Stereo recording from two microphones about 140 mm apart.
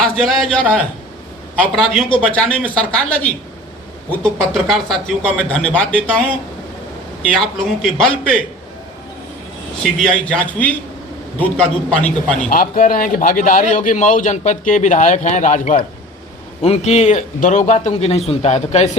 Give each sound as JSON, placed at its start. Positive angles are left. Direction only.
{"t": 0.0, "sound": "a man's voice", "side_deg": 0}
{"t": 1.8, "sound": "speech", "side_deg": -5}
{"t": 2.2, "sound": "a man's voice", "side_deg": 5}
{"t": 7.3, "sound": "speech", "side_deg": 5}
{"t": 9.8, "sound": "a man's voice", "side_deg": 0}
{"t": 12.5, "sound": "a man's voice", "side_deg": 80}
{"t": 16.6, "sound": "speech", "side_deg": 50}